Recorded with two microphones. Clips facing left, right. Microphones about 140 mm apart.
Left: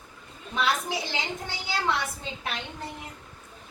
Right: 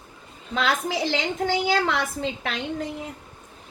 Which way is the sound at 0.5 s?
90° right.